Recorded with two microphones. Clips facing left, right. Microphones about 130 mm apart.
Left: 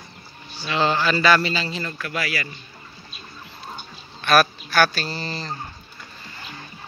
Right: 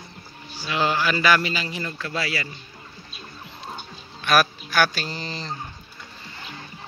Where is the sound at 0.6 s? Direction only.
10° right (ahead or behind); by 2.5 s 25° right (ahead or behind).